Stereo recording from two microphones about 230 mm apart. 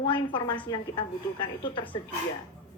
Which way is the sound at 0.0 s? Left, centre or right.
Left.